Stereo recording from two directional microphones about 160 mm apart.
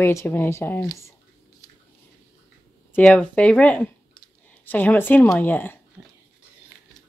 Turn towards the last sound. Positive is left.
turn(degrees=-15)  # may be behind; listen again after turning